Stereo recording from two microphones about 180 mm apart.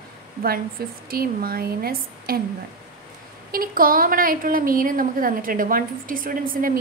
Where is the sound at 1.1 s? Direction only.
55° right (ahead or behind).